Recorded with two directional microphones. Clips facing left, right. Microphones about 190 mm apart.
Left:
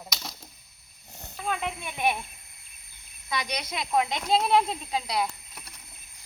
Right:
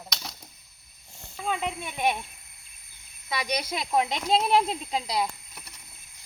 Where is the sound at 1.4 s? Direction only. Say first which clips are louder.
Right 1 dB; 20° right (ahead or behind).